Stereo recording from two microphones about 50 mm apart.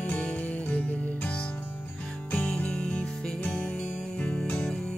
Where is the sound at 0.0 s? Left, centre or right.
Left.